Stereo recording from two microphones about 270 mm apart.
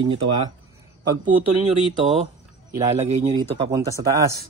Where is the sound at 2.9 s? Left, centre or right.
Right.